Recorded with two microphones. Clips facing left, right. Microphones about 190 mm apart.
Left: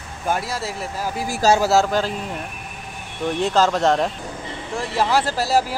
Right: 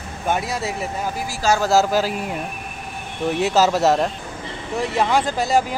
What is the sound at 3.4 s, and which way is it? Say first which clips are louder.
Speech: right 1 dB; 5° right (ahead or behind).